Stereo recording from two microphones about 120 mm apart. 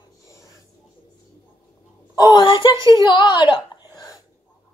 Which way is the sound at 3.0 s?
40° left (ahead or behind).